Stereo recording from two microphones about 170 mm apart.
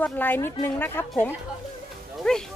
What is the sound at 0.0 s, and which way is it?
A woman's voice, 10° left (ahead or behind).